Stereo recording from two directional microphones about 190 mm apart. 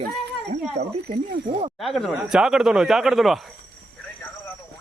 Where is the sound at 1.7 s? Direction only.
Centre (ahead or behind).